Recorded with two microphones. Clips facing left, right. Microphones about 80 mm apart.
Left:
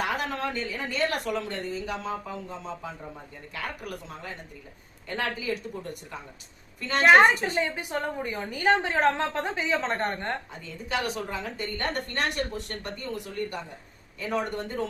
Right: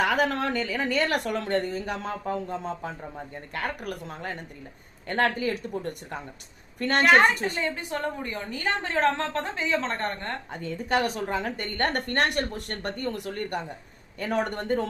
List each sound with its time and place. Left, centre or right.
0.0 s a woman's voice: right
7.6 s a woman's voice: centre
10.5 s a woman's voice: right